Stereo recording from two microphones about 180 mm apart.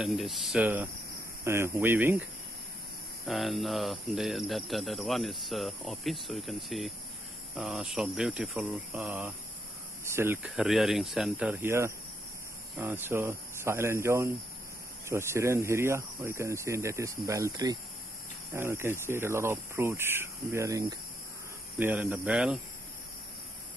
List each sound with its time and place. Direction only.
0.0 s cricket: centre (ahead or behind)
1.4 s speech: 15° right (ahead or behind)
3.3 s cricket: centre (ahead or behind)
12.7 s speech: 10° right (ahead or behind)